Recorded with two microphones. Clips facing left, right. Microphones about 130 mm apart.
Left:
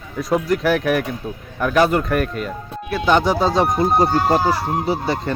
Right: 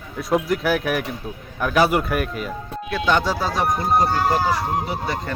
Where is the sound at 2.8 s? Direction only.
15° left (ahead or behind).